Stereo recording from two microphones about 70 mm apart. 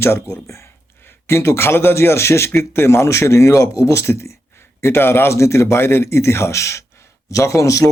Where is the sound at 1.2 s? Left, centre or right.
Left.